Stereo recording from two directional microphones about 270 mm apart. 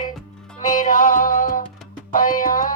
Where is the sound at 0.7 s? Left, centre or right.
Left.